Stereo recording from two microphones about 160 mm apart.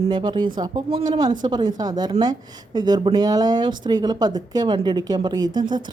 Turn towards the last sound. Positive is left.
turn(degrees=-25)  # may be behind; listen again after turning